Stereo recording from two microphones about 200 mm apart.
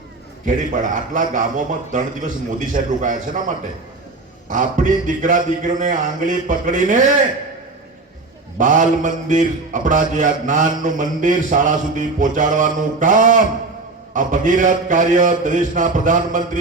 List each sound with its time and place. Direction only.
0.4 s a man's voice: 40° right (ahead or behind)
8.5 s a man's voice: 40° right (ahead or behind)